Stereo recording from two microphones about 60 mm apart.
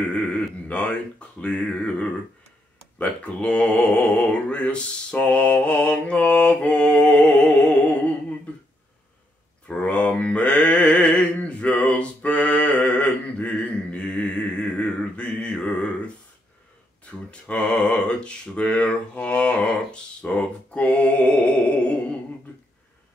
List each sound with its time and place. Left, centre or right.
0.7 s speech: left
9.7 s mantra: centre
17.3 s a sound: centre